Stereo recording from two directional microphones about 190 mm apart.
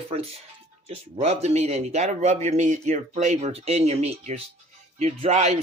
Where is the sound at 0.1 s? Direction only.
30° right (ahead or behind).